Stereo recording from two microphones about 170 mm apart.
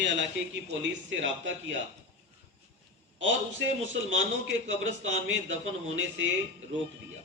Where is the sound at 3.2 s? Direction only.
90° right.